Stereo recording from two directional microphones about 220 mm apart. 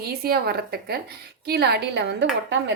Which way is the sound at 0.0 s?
45° right (ahead or behind).